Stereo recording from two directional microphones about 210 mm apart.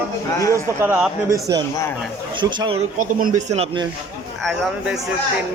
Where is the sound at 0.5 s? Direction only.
5° right (ahead or behind).